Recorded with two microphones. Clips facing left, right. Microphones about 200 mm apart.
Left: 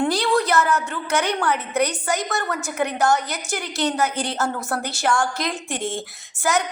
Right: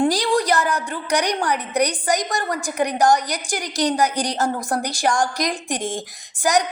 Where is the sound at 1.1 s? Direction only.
15° right (ahead or behind).